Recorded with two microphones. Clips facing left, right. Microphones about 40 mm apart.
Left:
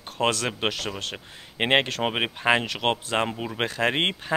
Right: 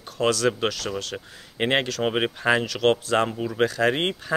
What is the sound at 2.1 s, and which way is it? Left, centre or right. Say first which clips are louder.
Speech: right 1 dB; centre.